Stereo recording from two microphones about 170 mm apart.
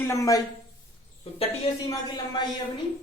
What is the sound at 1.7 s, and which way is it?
Speech, 35° left (ahead or behind).